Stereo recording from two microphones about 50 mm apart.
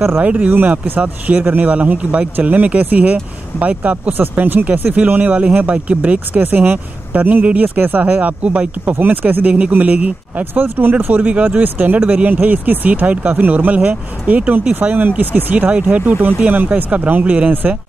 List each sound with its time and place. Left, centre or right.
0.2 s speech: right
6.4 s speech: right
10.5 s speech: right
11.6 s speech: right